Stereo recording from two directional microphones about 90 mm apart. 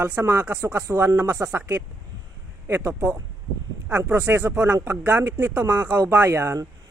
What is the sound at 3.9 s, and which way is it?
Speech, 20° right (ahead or behind).